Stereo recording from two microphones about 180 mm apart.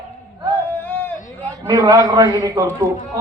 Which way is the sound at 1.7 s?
20° right (ahead or behind).